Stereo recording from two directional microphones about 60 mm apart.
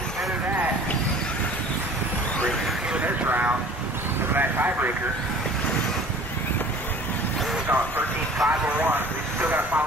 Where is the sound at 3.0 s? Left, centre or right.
Right.